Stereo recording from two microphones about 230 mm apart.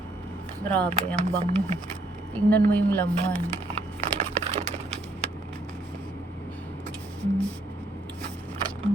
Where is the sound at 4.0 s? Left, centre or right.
Right.